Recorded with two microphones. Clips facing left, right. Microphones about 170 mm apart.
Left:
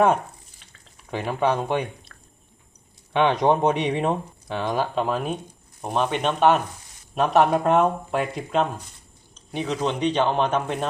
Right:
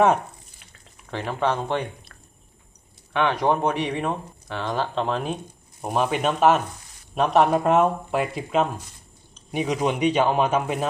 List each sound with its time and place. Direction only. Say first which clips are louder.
1.1 s speech: left 2 dB; 10° left (ahead or behind)
3.1 s speech: left 2 dB; 20° left (ahead or behind)
4.7 s speech: even; 5° left (ahead or behind)
9.5 s speech: right 2 dB; 15° right (ahead or behind)